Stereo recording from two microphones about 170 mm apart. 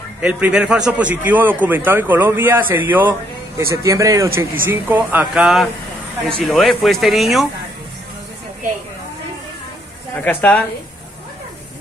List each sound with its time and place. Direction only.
0.2 s a man's voice: 5° right (ahead or behind)
10.1 s speech: 10° left (ahead or behind)